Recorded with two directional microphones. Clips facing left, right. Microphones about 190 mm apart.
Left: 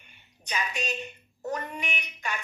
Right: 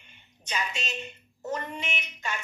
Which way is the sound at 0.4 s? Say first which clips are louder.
Left 1 dB; 15° left (ahead or behind).